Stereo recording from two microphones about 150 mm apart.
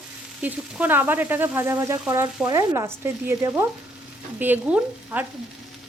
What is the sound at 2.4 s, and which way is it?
Stir, 20° right (ahead or behind).